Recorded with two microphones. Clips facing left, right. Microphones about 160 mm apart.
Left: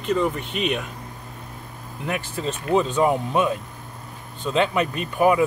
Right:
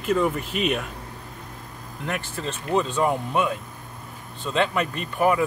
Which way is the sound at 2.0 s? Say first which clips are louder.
Left 3 dB; 10° left (ahead or behind).